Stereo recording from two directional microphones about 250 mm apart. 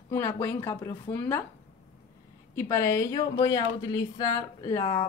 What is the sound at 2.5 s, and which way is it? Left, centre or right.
Speech, centre.